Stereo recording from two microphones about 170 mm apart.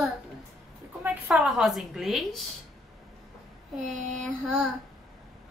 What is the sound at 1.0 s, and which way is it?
A woman's voice, 5° right (ahead or behind).